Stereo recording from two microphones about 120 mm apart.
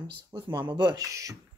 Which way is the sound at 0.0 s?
40° right (ahead or behind).